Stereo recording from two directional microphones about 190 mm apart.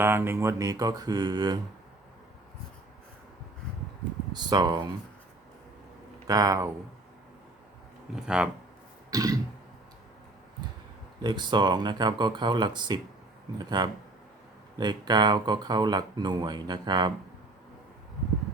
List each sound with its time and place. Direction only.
0.0 s speech: 10° right (ahead or behind)
4.3 s speech: 20° right (ahead or behind)
6.2 s speech: 20° right (ahead or behind)
8.1 s speech: 5° right (ahead or behind)
9.0 s a sound: 20° right (ahead or behind)
11.2 s speech: 25° right (ahead or behind)